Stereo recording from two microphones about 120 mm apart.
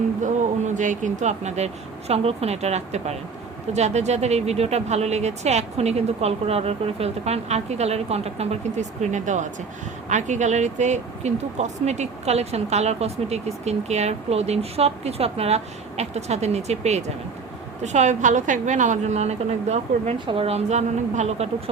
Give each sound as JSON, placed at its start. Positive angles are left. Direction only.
{"t": 0.2, "sound": "speech", "side_deg": -90}
{"t": 17.8, "sound": "speech", "side_deg": -75}
{"t": 20.1, "sound": "speech", "side_deg": -45}